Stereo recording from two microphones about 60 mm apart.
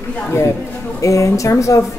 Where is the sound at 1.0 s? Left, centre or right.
Left.